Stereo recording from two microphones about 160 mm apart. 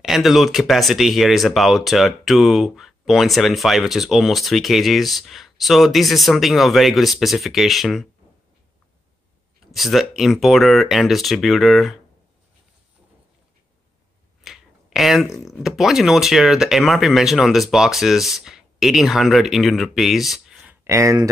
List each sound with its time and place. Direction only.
0.0 s speech: centre (ahead or behind)
9.7 s speech: centre (ahead or behind)
14.4 s speech: centre (ahead or behind)
20.8 s speech: 20° right (ahead or behind)